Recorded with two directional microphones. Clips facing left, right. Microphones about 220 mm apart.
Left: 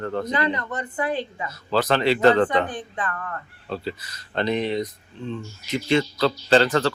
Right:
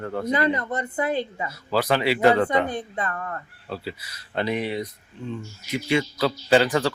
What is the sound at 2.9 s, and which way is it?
Speech, 25° right (ahead or behind).